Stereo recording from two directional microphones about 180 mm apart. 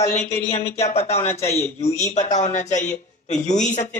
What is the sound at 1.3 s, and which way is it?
Speech, 35° left (ahead or behind).